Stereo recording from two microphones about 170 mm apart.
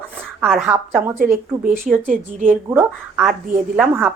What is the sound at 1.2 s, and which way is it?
Speech, 55° right (ahead or behind).